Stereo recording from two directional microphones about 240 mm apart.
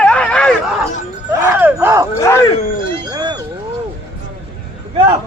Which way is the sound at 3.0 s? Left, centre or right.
Centre.